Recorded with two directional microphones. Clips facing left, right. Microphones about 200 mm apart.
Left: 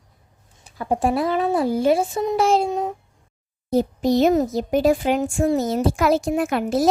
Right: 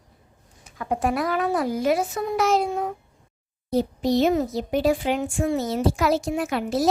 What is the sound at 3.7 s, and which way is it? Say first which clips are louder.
Speech: left 3 dB; 45° left (ahead or behind).